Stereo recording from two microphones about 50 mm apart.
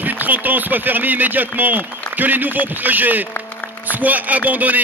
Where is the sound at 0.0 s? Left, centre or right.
Right.